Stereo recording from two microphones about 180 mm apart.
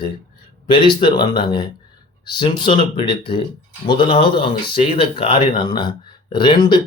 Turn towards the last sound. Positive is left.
turn(degrees=25)  # may be behind; listen again after turning